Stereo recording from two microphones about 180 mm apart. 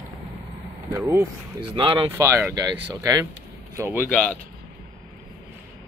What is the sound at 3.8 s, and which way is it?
Speech, 5° right (ahead or behind).